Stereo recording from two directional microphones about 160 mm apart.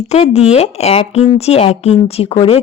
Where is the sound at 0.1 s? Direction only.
40° left (ahead or behind).